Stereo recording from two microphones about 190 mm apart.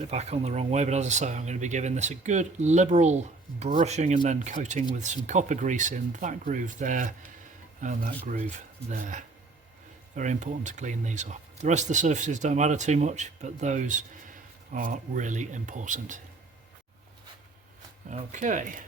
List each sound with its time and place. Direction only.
0.1 s speech: 35° right (ahead or behind)
18.1 s speech: 40° right (ahead or behind)